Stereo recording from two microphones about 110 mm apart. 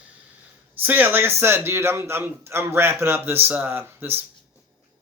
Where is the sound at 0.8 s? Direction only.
15° right (ahead or behind).